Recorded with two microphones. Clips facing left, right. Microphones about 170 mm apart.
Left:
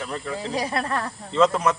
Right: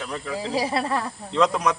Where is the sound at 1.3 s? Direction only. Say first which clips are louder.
Left 2 dB; centre (ahead or behind).